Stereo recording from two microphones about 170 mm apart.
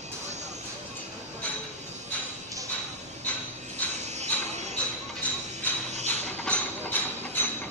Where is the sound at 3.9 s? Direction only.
40° right (ahead or behind).